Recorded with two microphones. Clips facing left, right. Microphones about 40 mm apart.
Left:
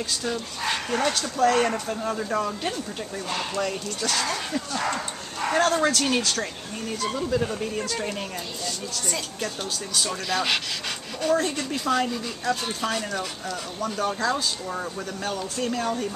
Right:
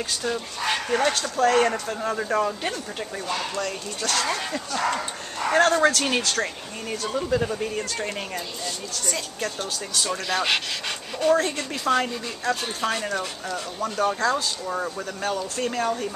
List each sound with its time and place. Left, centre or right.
0.9 s speech: centre
3.3 s speech: centre
5.6 s speech: centre
6.0 s speech: centre
9.9 s speech: centre